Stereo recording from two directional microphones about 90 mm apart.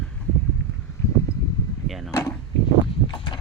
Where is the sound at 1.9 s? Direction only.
Centre (ahead or behind).